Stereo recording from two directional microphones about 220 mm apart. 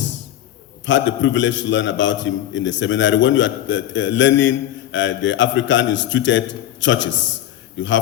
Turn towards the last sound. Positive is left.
turn(degrees=55)  # may be behind; listen again after turning